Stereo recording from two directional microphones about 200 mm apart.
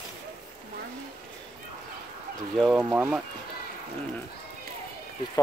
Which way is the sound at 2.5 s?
5° right (ahead or behind).